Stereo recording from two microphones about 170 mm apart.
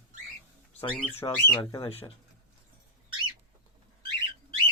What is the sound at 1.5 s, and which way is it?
Speech, 30° left (ahead or behind).